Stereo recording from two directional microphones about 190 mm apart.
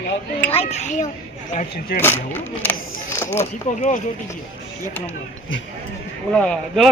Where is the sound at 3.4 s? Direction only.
35° left (ahead or behind).